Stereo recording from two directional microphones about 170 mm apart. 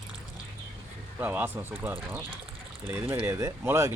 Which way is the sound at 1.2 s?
10° right (ahead or behind).